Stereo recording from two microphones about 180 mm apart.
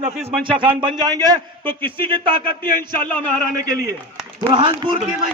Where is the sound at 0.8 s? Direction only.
25° right (ahead or behind).